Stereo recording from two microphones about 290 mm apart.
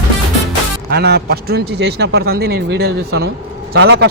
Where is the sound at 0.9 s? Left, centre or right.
Right.